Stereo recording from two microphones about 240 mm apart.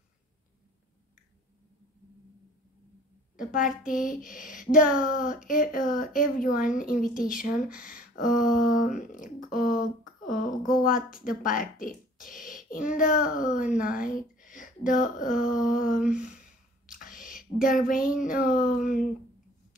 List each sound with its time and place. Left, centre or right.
3.3 s speech: left
16.1 s speech: centre
16.8 s a sound: left
18.5 s speech: left